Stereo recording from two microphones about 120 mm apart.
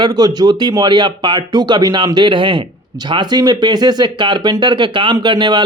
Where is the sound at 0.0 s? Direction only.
35° right (ahead or behind).